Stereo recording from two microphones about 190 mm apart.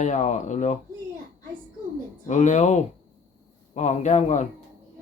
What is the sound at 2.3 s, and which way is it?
A man's voice, 40° left (ahead or behind).